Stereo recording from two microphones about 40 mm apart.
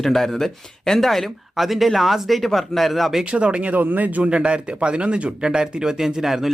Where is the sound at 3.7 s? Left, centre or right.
Right.